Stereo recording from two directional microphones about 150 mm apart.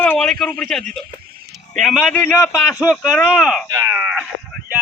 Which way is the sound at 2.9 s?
Centre (ahead or behind).